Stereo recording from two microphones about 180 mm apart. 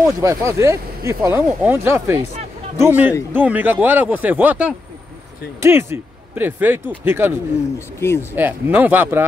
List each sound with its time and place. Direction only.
0.2 s speech: 15° right (ahead or behind)
8.0 s speech: 15° left (ahead or behind)
8.4 s speech: 10° right (ahead or behind)